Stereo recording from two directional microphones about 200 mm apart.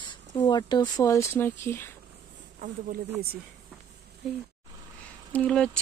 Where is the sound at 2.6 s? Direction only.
40° right (ahead or behind).